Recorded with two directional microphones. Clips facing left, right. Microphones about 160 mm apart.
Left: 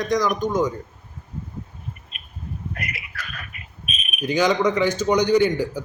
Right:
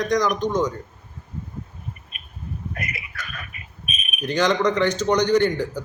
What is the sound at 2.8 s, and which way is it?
Speech, 25° right (ahead or behind).